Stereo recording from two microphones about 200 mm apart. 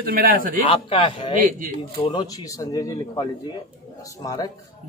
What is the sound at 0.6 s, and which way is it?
Speech, 25° left (ahead or behind).